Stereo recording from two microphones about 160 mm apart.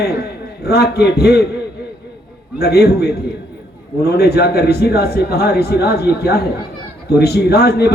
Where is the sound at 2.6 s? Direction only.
90° left.